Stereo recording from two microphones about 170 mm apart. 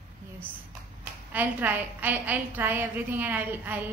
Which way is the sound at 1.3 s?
10° right (ahead or behind).